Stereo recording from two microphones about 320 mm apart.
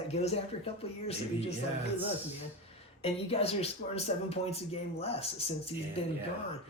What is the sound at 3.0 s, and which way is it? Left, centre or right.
Speech, centre.